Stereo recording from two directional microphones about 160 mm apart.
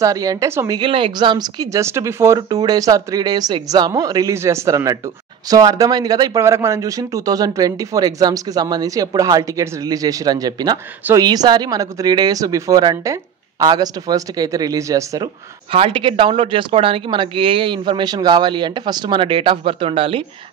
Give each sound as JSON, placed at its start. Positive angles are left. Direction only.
{"t": 0.0, "sound": "speech", "side_deg": -20}
{"t": 0.7, "sound": "speech", "side_deg": -30}
{"t": 15.7, "sound": "speech", "side_deg": -35}